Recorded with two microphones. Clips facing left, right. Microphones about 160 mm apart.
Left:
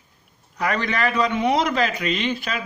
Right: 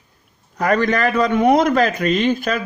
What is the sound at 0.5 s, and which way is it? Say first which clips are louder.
A man's voice: right 6 dB; 45° right (ahead or behind).